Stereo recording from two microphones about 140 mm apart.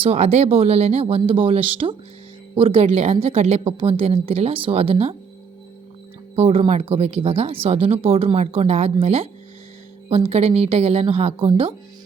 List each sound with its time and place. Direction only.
0.0 s speech: 50° right (ahead or behind)
6.3 s speech: 45° right (ahead or behind)